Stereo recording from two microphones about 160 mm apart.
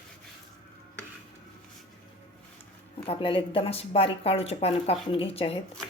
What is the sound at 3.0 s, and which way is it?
Speech, 35° left (ahead or behind).